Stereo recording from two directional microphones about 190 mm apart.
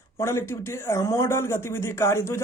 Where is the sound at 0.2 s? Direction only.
15° left (ahead or behind).